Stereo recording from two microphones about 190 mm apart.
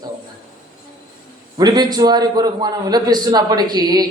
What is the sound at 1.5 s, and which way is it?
A man's voice, 20° right (ahead or behind).